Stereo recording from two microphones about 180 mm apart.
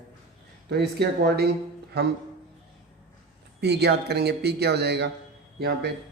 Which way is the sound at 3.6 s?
65° right (ahead or behind).